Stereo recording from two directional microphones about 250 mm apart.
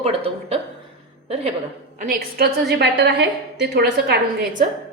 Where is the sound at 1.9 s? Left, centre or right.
Right.